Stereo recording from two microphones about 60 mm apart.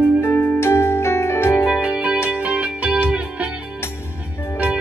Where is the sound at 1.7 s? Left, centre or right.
Centre.